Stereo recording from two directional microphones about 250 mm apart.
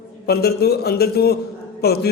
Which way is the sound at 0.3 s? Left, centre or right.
Left.